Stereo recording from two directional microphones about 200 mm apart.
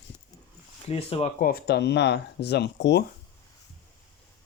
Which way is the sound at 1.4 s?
50° left (ahead or behind).